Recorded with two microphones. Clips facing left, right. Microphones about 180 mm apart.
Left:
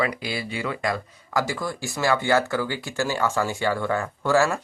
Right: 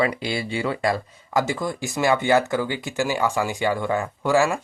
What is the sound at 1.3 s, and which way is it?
Speech, 20° right (ahead or behind).